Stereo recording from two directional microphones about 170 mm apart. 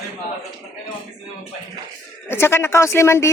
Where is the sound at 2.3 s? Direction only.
15° left (ahead or behind).